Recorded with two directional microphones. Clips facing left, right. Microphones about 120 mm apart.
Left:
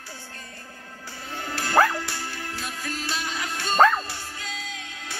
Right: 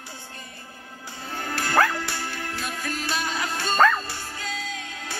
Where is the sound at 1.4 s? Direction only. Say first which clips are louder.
Left 1 dB; 55° right (ahead or behind).